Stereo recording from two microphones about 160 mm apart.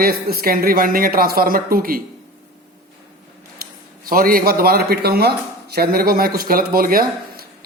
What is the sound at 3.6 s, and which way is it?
Speech, 65° right (ahead or behind).